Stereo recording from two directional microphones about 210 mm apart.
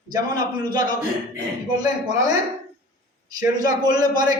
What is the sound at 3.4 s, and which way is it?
Speech, 20° right (ahead or behind).